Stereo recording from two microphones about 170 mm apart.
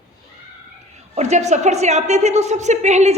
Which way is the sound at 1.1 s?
40° right (ahead or behind).